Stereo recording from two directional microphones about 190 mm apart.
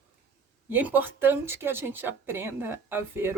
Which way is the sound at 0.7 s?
10° right (ahead or behind).